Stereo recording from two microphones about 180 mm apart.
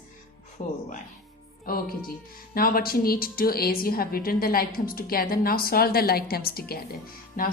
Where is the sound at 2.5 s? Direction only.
55° left (ahead or behind).